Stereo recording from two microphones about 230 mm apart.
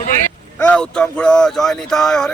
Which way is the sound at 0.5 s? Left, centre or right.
Centre.